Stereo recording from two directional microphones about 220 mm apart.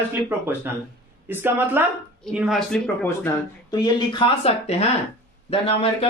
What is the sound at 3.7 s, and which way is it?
Speech, 20° left (ahead or behind).